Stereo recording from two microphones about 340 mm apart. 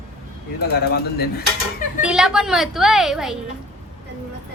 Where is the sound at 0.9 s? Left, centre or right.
Left.